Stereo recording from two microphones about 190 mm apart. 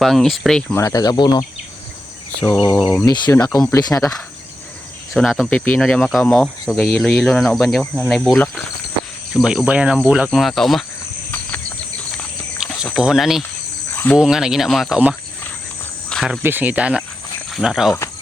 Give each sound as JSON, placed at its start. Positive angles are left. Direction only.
{"t": 0.0, "sound": "speech", "side_deg": 0}
{"t": 0.8, "sound": "speech", "side_deg": 15}
{"t": 2.6, "sound": "speech", "side_deg": 15}
{"t": 5.1, "sound": "speech", "side_deg": 0}
{"t": 12.8, "sound": "speech", "side_deg": -5}
{"t": 13.9, "sound": "cricket", "side_deg": 10}
{"t": 14.2, "sound": "speech", "side_deg": -5}
{"t": 16.0, "sound": "cricket", "side_deg": 0}
{"t": 16.4, "sound": "speech", "side_deg": -10}